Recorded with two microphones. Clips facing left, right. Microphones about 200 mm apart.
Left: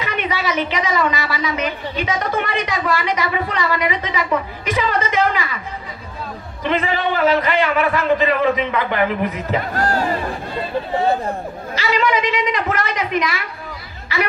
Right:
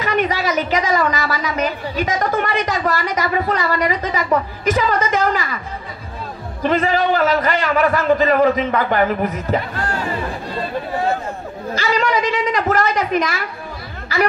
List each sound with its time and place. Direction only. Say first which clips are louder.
0.0 s a woman's voice: right 4 dB; 40° right (ahead or behind)
6.6 s a woman's voice: right 3 dB; 40° right (ahead or behind)
9.8 s speech: left 4 dB; 40° left (ahead or behind)
11.8 s a woman's voice: even; 40° right (ahead or behind)